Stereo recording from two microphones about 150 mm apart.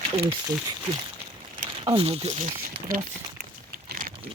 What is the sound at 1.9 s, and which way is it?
Speech, 40° right (ahead or behind).